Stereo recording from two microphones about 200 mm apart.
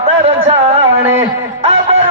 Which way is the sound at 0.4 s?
30° right (ahead or behind).